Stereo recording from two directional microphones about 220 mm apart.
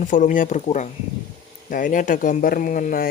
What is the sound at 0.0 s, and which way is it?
Speech, 35° left (ahead or behind).